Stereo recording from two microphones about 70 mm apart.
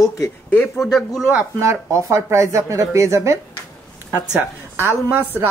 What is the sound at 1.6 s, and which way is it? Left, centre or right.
A woman's voice, right.